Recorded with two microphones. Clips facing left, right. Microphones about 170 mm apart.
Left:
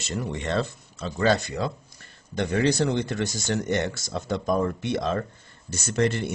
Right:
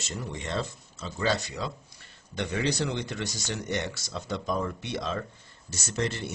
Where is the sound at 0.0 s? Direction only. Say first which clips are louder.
Left 6 dB; 65° left (ahead or behind).